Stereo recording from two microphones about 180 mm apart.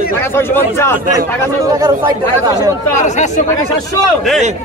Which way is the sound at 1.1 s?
20° right (ahead or behind).